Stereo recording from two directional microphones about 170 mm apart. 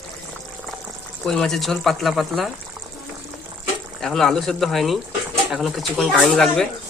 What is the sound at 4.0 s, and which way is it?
Speech, centre (ahead or behind).